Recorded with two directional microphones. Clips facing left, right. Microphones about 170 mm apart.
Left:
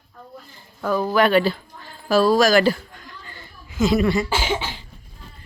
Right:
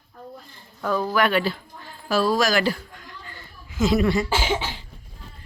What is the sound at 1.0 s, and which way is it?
A woman's voice, 30° left (ahead or behind).